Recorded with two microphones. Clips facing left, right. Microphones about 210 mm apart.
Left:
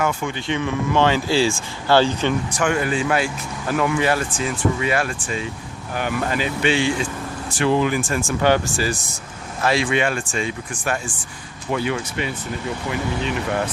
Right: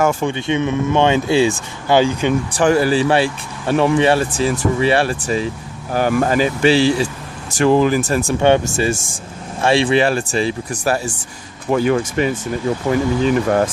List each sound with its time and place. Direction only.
0.2 s speech: 25° right (ahead or behind)
2.5 s speech: 35° right (ahead or behind)
8.3 s speech: 25° right (ahead or behind); by 13.7 s 45° right (ahead or behind)